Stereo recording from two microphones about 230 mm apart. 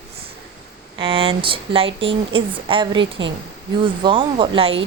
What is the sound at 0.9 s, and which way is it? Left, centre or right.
A woman's voice, right.